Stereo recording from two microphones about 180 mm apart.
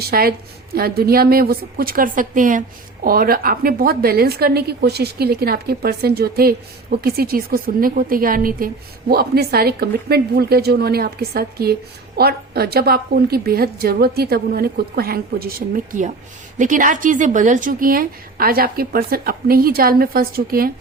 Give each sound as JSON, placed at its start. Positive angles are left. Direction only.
{"t": 0.1, "sound": "a woman's voice", "side_deg": -60}